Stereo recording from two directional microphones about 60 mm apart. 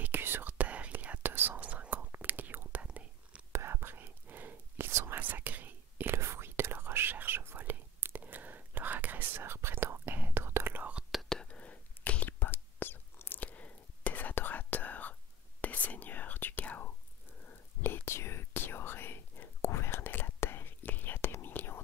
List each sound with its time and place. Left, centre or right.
0.0 s whispering: right
3.5 s whispering: right
5.2 s whispering: right
10.8 s whispering: right
11.4 s whispering: left
12.3 s whispering: left
13.5 s whispering: left
20.8 s whispering: left